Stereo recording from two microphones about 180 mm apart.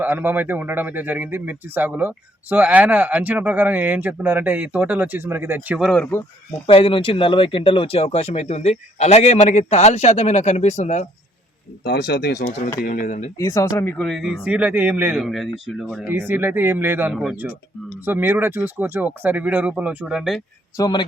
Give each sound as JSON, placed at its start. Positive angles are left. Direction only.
{"t": 0.0, "sound": "speech", "side_deg": -10}
{"t": 6.7, "sound": "speech", "side_deg": 30}
{"t": 11.8, "sound": "speech", "side_deg": 65}
{"t": 12.4, "sound": "speech", "side_deg": 45}
{"t": 13.4, "sound": "speech", "side_deg": 20}
{"t": 20.7, "sound": "a man's voice", "side_deg": 20}